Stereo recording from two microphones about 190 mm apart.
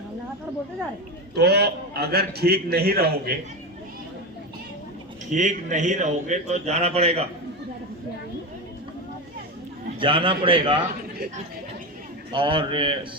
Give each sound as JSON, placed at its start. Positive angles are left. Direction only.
{"t": 1.4, "sound": "a man's voice", "side_deg": -60}
{"t": 5.3, "sound": "a man's voice", "side_deg": -40}
{"t": 10.0, "sound": "a man's voice", "side_deg": -25}
{"t": 12.3, "sound": "a man's voice", "side_deg": -25}